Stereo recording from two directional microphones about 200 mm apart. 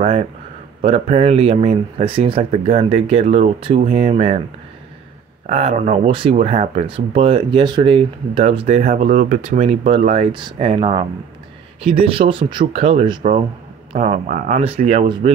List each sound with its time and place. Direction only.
0.0 s a sound: 35° right (ahead or behind)
0.7 s speech: 30° right (ahead or behind)
5.5 s speech: 30° right (ahead or behind)
14.6 s speech: 30° right (ahead or behind)